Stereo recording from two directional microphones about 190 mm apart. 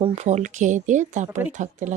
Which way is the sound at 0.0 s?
35° right (ahead or behind).